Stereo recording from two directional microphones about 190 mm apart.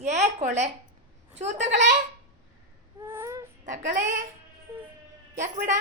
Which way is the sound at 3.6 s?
40° right (ahead or behind).